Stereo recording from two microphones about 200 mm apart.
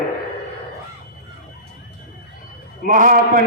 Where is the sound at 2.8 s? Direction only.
40° right (ahead or behind).